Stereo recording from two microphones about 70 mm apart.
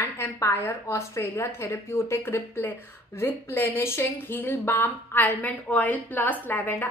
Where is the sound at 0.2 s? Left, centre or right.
Left.